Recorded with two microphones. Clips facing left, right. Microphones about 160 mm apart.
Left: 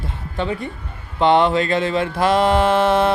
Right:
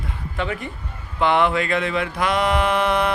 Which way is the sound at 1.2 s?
30° left (ahead or behind).